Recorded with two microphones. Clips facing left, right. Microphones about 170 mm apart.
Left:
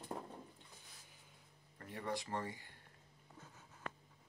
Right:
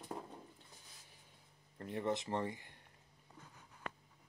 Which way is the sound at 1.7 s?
25° right (ahead or behind).